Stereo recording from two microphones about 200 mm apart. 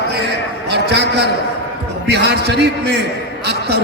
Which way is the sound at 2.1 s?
55° right (ahead or behind).